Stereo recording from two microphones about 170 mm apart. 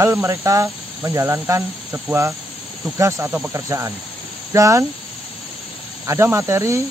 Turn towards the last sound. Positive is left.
turn(degrees=-15)  # may be behind; listen again after turning